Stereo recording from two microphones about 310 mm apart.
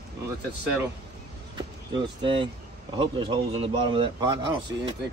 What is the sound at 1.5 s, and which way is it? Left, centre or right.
Vehicle, centre.